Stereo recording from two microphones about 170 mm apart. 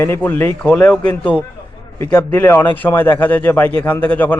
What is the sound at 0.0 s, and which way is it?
A man's voice, 10° left (ahead or behind).